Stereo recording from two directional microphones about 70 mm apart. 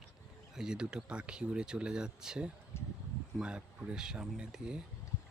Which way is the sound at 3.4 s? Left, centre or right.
Centre.